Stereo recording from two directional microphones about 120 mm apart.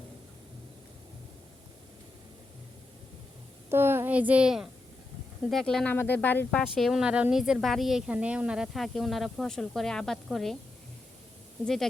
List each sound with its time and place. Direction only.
3.7 s a child's voice: 20° right (ahead or behind); by 5.9 s 5° left (ahead or behind)
5.9 s speech: 15° left (ahead or behind)
6.7 s a woman's voice: centre (ahead or behind)
11.6 s a woman's voice: 5° left (ahead or behind)